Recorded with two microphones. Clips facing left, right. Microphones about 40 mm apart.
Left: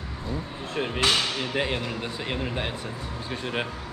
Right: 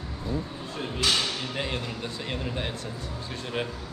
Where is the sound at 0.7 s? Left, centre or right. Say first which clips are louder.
Left 3 dB; left.